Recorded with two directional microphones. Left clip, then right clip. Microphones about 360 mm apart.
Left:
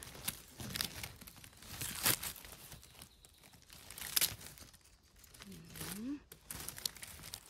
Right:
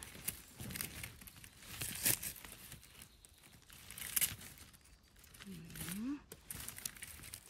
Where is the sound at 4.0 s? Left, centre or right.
Left.